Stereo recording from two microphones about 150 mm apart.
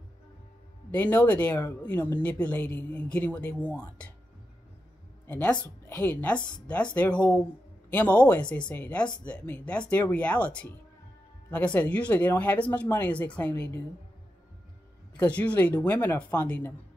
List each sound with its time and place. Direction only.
0.9 s speech: 10° left (ahead or behind)
5.2 s a woman's voice: 10° left (ahead or behind)
5.6 s a woman's voice: 20° left (ahead or behind)
6.7 s speech: 10° left (ahead or behind)
15.1 s speech: 10° left (ahead or behind)